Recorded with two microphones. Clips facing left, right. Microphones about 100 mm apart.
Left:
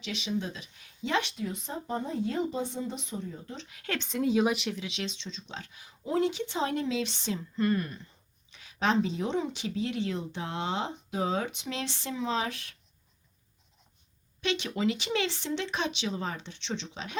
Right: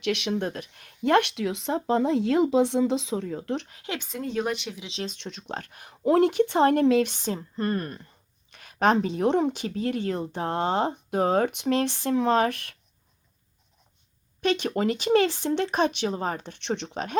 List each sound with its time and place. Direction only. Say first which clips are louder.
0.0 s speech: right 7 dB; 65° right (ahead or behind)
3.8 s speech: right 1 dB; 10° right (ahead or behind)
4.1 s speech: left 3 dB; 5° left (ahead or behind)
5.0 s speech: right 4 dB; 55° right (ahead or behind)
14.4 s speech: right 5 dB; 45° right (ahead or behind)